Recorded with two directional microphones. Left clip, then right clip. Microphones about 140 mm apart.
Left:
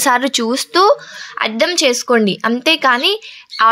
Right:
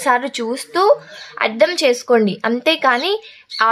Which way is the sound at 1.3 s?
5° left (ahead or behind).